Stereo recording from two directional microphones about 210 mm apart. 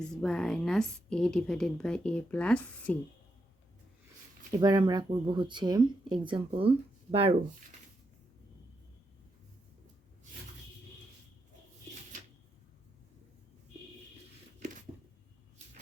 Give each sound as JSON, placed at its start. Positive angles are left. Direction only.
{"t": 0.0, "sound": "a woman's voice", "side_deg": 5}
{"t": 4.5, "sound": "speech", "side_deg": -20}
{"t": 14.6, "sound": "a sound", "side_deg": -35}